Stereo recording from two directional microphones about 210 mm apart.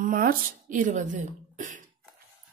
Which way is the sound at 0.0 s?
45° right (ahead or behind).